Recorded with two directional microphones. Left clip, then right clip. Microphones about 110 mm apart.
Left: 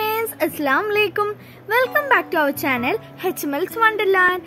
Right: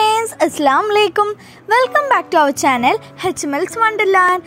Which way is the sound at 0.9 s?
60° right (ahead or behind).